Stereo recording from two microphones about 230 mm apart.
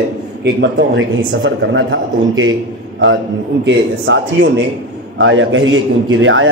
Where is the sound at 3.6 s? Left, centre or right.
Right.